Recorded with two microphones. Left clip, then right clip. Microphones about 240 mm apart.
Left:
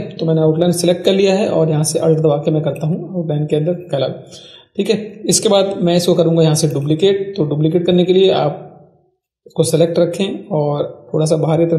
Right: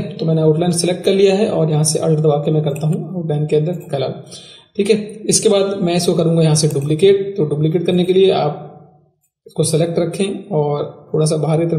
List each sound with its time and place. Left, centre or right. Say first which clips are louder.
0.3 s a man's voice: left 1 dB; centre
9.6 s a man's voice: left 4 dB; centre